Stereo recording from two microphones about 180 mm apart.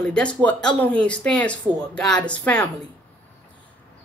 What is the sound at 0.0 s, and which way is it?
Speech, 5° left (ahead or behind).